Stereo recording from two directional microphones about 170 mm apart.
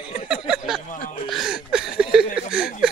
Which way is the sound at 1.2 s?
Centre (ahead or behind).